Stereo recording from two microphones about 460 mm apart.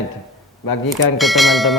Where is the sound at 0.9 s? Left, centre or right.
Centre.